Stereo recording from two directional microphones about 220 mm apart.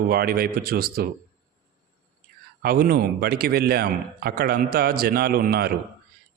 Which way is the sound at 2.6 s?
40° right (ahead or behind).